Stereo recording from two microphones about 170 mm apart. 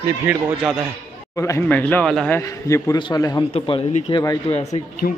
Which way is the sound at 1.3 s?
15° left (ahead or behind).